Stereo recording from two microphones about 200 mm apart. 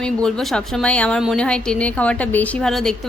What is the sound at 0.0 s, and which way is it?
A woman's voice, 5° left (ahead or behind).